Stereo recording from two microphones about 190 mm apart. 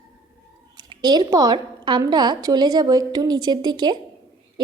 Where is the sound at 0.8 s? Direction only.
20° right (ahead or behind).